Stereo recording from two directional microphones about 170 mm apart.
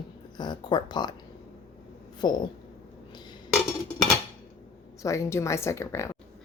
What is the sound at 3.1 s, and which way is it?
Dishes, 25° left (ahead or behind).